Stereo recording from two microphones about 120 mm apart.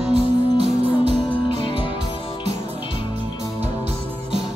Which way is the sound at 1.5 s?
40° left (ahead or behind).